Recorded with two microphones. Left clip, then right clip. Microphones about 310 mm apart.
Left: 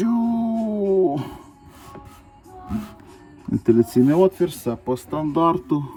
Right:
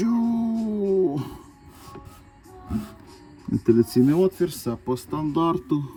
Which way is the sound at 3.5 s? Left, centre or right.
Centre.